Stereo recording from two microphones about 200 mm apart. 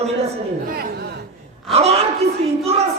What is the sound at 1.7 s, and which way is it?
Speech, 30° right (ahead or behind).